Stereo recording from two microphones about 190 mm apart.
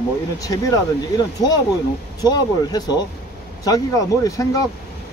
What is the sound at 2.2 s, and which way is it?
Speech, 20° left (ahead or behind).